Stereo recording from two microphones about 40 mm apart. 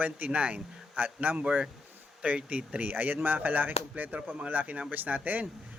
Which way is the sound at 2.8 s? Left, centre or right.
Right.